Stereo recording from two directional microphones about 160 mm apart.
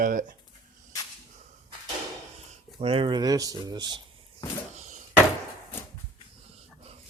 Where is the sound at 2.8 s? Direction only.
35° right (ahead or behind).